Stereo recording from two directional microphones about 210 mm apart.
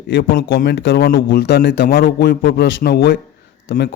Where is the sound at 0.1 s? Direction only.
45° left (ahead or behind).